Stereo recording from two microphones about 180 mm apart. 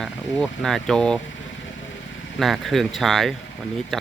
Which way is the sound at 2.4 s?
Centre (ahead or behind).